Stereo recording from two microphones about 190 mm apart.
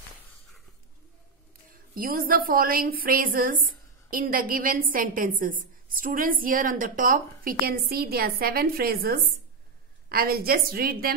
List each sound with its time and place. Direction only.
1.7 s a woman's voice: 50° right (ahead or behind)